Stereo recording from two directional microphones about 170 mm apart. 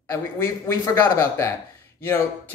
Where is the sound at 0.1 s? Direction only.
15° left (ahead or behind).